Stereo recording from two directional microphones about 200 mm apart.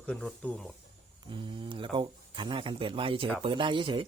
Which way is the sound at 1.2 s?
25° right (ahead or behind).